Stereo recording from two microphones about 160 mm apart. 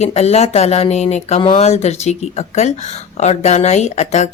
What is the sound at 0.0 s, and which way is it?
Speech, 40° left (ahead or behind).